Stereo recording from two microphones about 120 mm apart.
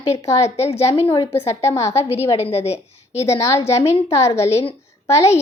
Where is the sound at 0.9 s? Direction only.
45° left (ahead or behind).